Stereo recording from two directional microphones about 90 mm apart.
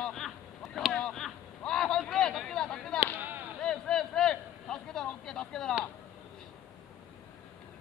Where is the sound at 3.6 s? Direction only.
5° left (ahead or behind).